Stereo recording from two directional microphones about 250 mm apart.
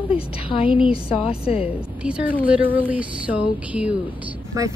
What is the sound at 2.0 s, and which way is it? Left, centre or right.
Speech, centre.